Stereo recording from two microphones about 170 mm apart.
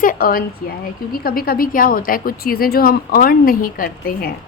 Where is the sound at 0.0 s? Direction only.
55° left (ahead or behind).